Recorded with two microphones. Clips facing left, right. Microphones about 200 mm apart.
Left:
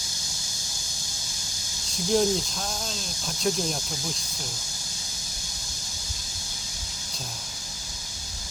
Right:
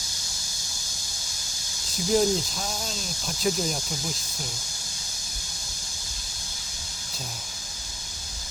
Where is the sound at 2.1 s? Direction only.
Centre (ahead or behind).